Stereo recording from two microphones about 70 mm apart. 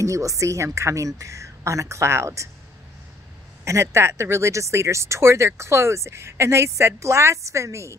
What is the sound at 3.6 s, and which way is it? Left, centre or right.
Speech, right.